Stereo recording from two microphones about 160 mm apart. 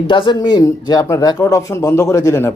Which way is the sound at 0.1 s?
30° left (ahead or behind).